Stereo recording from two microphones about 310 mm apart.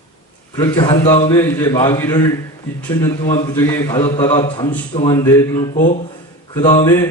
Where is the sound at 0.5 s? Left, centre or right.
Centre.